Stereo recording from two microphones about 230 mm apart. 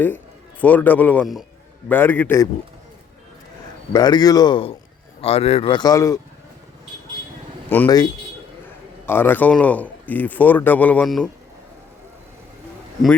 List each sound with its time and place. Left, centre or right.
0.6 s speech: centre
3.9 s speech: centre
7.7 s speech: centre